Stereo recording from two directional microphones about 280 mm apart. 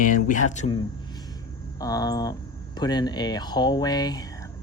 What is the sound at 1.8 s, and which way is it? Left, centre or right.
Speech, centre.